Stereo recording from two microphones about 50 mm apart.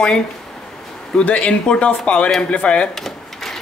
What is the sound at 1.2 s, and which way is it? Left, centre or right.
Speech, left.